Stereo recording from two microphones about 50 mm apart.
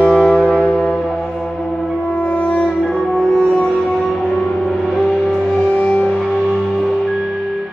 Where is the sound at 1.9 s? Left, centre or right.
Left.